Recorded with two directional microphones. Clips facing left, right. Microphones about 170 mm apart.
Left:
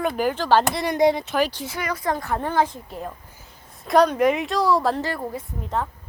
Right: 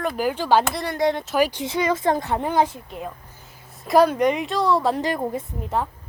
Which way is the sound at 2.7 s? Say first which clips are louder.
Even; 5° right (ahead or behind).